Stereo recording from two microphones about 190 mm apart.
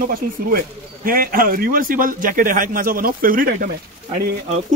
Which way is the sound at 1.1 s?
50° right (ahead or behind).